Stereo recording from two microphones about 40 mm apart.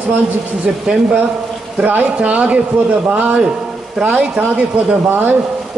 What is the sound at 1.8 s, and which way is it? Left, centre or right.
Speech, right.